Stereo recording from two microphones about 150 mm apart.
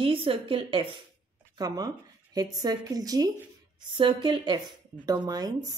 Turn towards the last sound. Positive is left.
turn(degrees=-25)  # may be behind; listen again after turning